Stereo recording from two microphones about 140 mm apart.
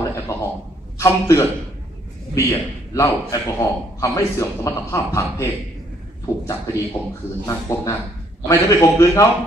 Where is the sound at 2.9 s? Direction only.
25° left (ahead or behind).